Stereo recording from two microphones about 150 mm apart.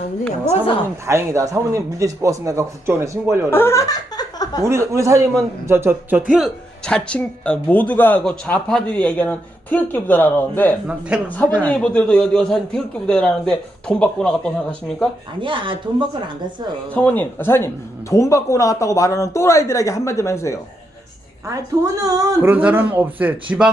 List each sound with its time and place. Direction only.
1.0 s a man's voice: 20° right (ahead or behind)
3.5 s speech: 15° left (ahead or behind)
4.6 s a man's voice: 20° right (ahead or behind)
6.3 s speech: centre (ahead or behind)
11.1 s speech: 5° right (ahead or behind)
11.6 s a man's voice: 5° left (ahead or behind)
15.4 s speech: 35° right (ahead or behind)
16.9 s speech: 10° left (ahead or behind)
22.0 s speech: 20° right (ahead or behind)